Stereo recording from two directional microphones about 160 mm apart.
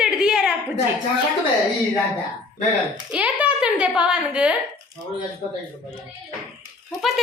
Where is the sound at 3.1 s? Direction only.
5° right (ahead or behind).